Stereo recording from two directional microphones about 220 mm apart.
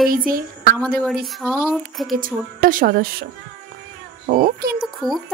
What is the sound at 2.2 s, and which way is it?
Speech, 40° right (ahead or behind).